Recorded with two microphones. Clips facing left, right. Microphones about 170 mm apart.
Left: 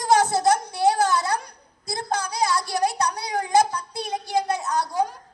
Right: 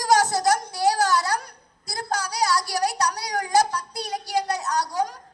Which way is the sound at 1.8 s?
25° left (ahead or behind).